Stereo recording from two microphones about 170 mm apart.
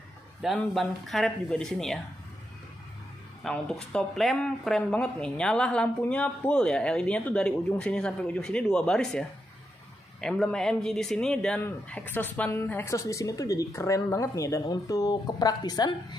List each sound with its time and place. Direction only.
0.4 s speech: centre (ahead or behind)
3.4 s speech: 5° left (ahead or behind)
10.2 s speech: 5° left (ahead or behind); by 16.2 s 25° left (ahead or behind)